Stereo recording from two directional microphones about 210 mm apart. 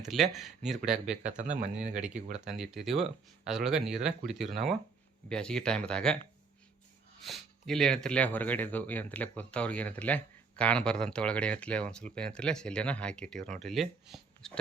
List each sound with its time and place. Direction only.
0.0 s speech: centre (ahead or behind)
1.4 s speech: 35° right (ahead or behind)
2.0 s speech: 5° right (ahead or behind)
7.2 s speech: centre (ahead or behind)